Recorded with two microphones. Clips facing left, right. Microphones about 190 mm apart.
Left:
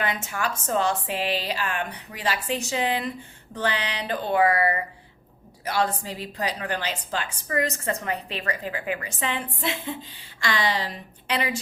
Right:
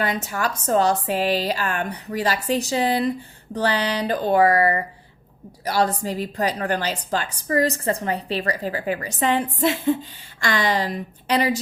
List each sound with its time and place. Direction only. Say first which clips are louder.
0.0 s a woman's voice: right 4 dB; 40° right (ahead or behind)